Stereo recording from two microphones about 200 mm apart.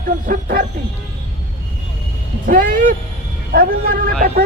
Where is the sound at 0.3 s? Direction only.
50° right (ahead or behind).